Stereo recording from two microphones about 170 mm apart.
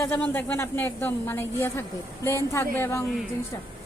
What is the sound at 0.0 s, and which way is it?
A woman's voice, 10° left (ahead or behind).